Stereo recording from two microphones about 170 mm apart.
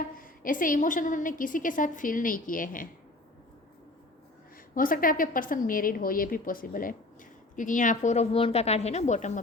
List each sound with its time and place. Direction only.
0.2 s a woman's voice: 55° left (ahead or behind)
4.7 s a woman's voice: 55° left (ahead or behind)